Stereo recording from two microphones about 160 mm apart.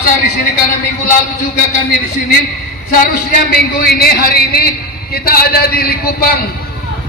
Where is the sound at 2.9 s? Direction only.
65° left (ahead or behind).